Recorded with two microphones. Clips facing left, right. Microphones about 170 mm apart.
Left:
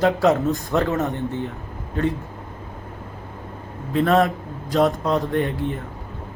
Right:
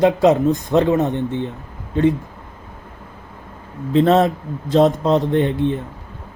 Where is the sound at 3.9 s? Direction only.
25° right (ahead or behind).